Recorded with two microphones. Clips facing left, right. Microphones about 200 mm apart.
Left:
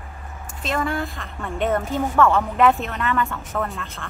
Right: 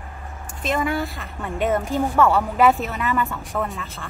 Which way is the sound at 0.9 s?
5° right (ahead or behind).